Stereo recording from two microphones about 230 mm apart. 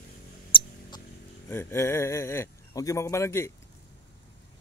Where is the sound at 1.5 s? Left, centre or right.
Centre.